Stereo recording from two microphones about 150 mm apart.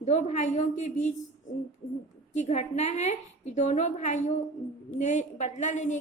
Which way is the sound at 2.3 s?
50° left (ahead or behind).